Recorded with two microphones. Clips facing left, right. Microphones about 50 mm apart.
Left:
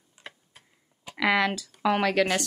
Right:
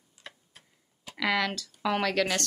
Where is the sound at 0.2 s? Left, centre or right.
Left.